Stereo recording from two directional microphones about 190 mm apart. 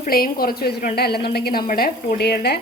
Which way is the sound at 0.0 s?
50° left (ahead or behind).